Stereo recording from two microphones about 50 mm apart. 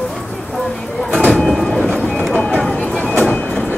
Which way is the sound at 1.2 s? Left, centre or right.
Centre.